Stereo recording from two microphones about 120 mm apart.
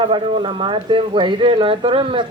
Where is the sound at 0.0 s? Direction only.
45° right (ahead or behind).